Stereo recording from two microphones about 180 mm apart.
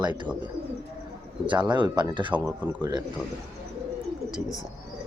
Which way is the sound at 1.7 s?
25° right (ahead or behind).